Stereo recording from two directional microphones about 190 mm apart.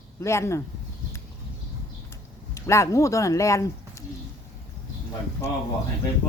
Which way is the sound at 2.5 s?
15° left (ahead or behind).